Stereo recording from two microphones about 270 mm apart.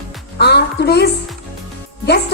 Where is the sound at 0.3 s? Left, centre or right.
Left.